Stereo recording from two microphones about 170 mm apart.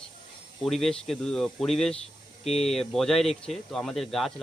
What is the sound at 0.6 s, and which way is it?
Speech, centre (ahead or behind).